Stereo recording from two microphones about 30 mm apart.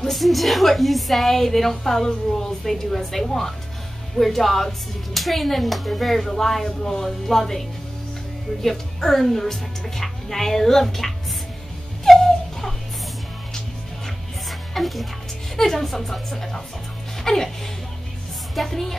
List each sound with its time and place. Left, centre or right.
0.0 s a woman's voice: centre
8.6 s a woman's voice: centre
12.1 s music: centre
14.7 s music: centre
15.5 s a woman's voice: centre
17.2 s music: centre
18.7 s a woman's voice: centre